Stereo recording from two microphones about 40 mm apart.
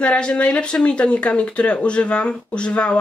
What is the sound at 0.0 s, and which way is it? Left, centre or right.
Speech, left.